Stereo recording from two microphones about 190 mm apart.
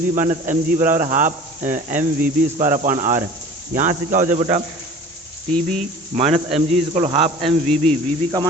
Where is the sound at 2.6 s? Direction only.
40° right (ahead or behind).